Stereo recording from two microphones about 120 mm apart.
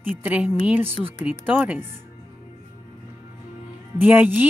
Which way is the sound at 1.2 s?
15° right (ahead or behind).